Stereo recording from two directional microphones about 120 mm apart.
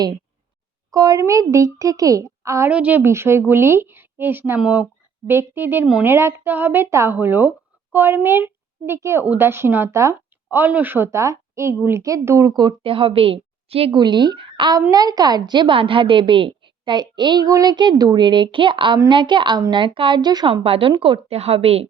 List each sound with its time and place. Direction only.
0.9 s a woman's voice: 30° right (ahead or behind)
2.6 s a woman's voice: 10° right (ahead or behind); by 14.0 s 55° right (ahead or behind)
14.0 s a woman's voice: 40° right (ahead or behind)
20.7 s a woman's voice: 50° right (ahead or behind)